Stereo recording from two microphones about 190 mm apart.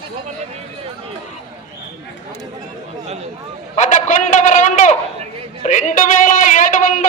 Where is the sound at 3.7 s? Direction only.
40° left (ahead or behind).